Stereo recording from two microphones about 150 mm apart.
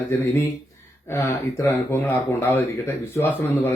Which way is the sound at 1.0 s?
20° left (ahead or behind).